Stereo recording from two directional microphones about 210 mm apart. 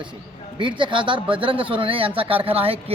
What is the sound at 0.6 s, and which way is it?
A man's voice, 25° right (ahead or behind).